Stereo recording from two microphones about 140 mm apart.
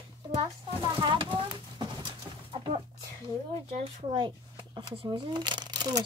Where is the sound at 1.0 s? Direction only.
35° right (ahead or behind).